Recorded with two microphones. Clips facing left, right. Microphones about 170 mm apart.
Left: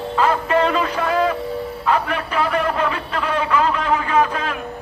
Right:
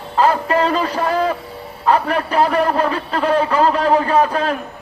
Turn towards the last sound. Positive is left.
turn(degrees=-35)  # may be behind; listen again after turning